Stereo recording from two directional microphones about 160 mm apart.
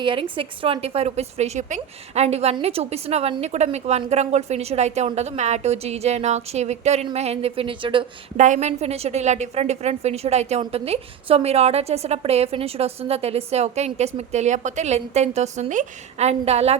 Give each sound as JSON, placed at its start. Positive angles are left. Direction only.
{"t": 0.0, "sound": "a woman's voice", "side_deg": -30}
{"t": 8.4, "sound": "a woman's voice", "side_deg": -45}